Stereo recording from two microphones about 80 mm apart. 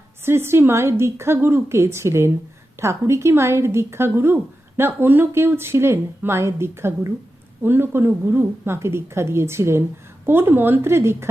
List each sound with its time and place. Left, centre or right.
0.3 s speech: right